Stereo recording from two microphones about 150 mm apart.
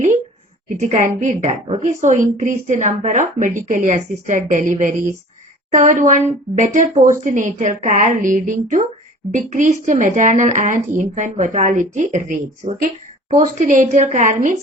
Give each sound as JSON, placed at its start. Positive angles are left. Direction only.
{"t": 0.8, "sound": "a woman's voice", "side_deg": -55}